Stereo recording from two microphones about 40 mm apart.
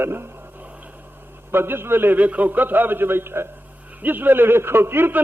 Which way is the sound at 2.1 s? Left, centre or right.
Right.